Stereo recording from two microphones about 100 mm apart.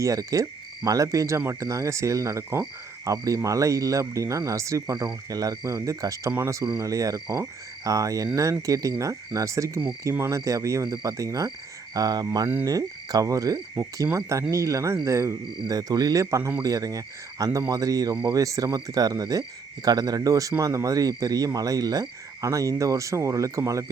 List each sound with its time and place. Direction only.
0.0 s speech: 35° right (ahead or behind)